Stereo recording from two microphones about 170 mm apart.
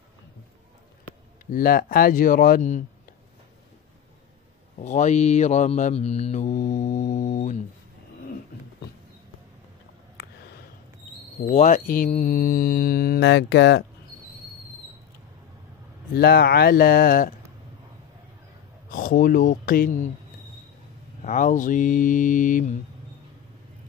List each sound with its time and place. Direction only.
1.4 s speech: 55° left (ahead or behind)
4.7 s mantra: 45° left (ahead or behind)
11.5 s mantra: 50° left (ahead or behind)
12.1 s speech: 50° left (ahead or behind); by 13.8 s 85° left
16.2 s speech: 65° left (ahead or behind)
18.9 s speech: 55° left (ahead or behind)
21.2 s mantra: 50° left (ahead or behind)